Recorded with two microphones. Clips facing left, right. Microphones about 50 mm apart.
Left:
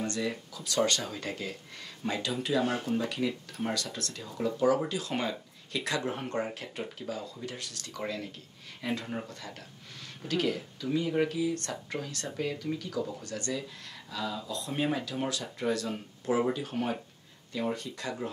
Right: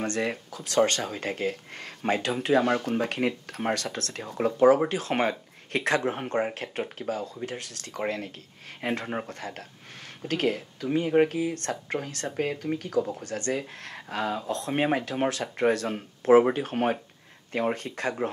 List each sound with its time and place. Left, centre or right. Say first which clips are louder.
0.0 s speech: right 4 dB; right
6.1 s speech: right 5 dB; right
6.5 s speech: right 5 dB; right